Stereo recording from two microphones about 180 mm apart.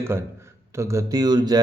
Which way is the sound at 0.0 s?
15° right (ahead or behind).